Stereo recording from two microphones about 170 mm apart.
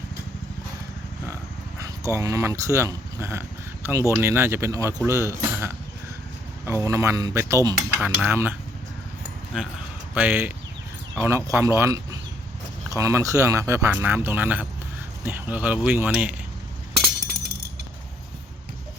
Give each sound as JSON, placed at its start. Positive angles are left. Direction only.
{"t": 1.8, "sound": "speech", "side_deg": -20}
{"t": 10.2, "sound": "speech", "side_deg": -10}